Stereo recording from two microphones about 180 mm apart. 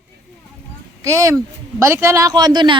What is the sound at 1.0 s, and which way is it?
Speech, 15° right (ahead or behind).